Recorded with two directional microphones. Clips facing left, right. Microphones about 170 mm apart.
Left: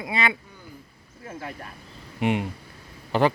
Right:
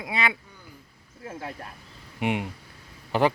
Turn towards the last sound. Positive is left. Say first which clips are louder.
# left 1 dB
turn(degrees=-10)  # may be behind; listen again after turning